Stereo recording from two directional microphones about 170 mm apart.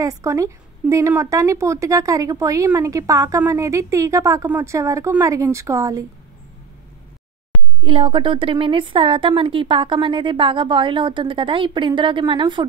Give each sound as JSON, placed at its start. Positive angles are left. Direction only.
{"t": 0.0, "sound": "a woman's voice", "side_deg": -20}
{"t": 7.8, "sound": "a woman's voice", "side_deg": -30}